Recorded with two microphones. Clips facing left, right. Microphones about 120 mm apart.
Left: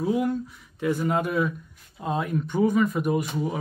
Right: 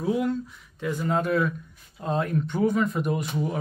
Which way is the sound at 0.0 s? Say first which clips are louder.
Left 1 dB; 5° left (ahead or behind).